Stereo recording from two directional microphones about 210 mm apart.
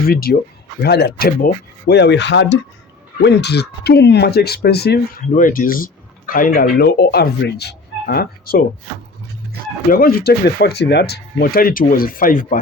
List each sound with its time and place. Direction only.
0.1 s speech: 45° left (ahead or behind)
9.9 s speech: 45° left (ahead or behind)